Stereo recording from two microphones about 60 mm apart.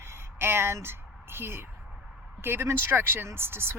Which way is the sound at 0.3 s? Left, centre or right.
Right.